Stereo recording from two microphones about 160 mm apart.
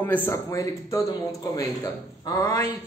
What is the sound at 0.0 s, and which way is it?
A man's voice, 10° left (ahead or behind).